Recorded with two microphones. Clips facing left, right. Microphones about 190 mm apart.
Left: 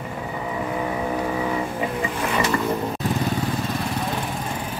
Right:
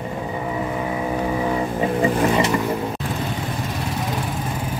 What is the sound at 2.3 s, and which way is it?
Music, 25° right (ahead or behind).